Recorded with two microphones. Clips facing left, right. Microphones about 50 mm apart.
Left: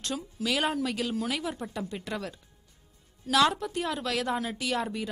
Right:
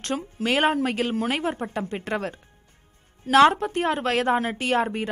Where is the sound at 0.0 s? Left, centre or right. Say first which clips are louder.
Right 5 dB; right.